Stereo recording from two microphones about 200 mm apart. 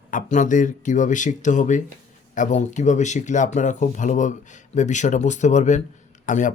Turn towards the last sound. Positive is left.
turn(degrees=40)  # may be behind; listen again after turning